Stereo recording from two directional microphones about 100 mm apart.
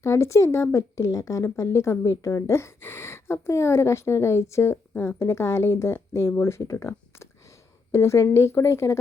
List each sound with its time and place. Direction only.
0.0 s speech: 30° left (ahead or behind)